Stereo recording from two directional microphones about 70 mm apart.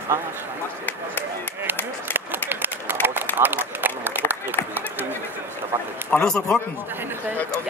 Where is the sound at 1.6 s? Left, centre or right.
Right.